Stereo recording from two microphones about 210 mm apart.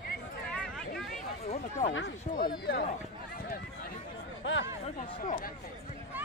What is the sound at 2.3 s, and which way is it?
Run, 45° left (ahead or behind).